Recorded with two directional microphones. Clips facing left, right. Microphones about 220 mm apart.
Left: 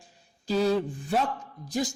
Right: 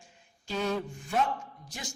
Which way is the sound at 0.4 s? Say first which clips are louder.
Left 7 dB; 35° left (ahead or behind).